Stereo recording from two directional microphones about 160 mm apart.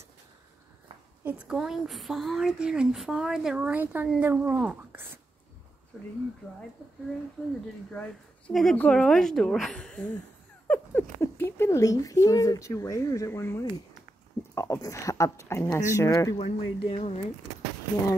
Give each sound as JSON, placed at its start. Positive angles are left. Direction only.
{"t": 1.2, "sound": "a woman's voice", "side_deg": -5}
{"t": 7.9, "sound": "a woman's voice", "side_deg": 5}
{"t": 16.3, "sound": "speech", "side_deg": 35}